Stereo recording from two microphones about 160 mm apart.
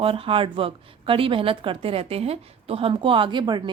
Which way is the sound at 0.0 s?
35° right (ahead or behind).